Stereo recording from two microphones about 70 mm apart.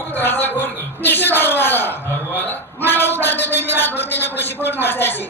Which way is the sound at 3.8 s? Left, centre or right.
Left.